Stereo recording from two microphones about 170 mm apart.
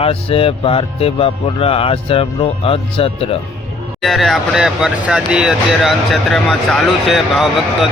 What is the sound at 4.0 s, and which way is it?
Speech, centre (ahead or behind).